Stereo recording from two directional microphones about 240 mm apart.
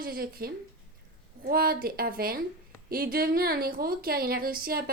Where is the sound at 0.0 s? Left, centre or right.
Right.